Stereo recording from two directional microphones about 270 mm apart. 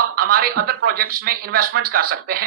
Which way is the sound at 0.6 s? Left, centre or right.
Right.